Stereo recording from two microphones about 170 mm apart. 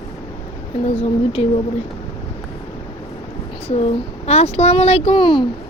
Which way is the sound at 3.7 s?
35° left (ahead or behind).